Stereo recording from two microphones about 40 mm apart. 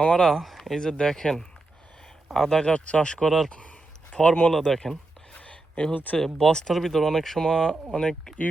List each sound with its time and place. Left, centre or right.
0.0 s speech: left
0.3 s speech: centre
2.6 s speech: left
3.2 s speech: centre
4.1 s speech: left
4.5 s speech: centre
5.5 s a sound: left
5.9 s speech: left
6.1 s speech: centre